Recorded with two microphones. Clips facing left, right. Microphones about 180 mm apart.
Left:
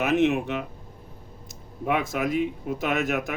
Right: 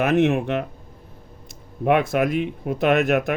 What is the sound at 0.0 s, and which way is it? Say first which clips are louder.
Speech: right 3 dB; 55° right (ahead or behind).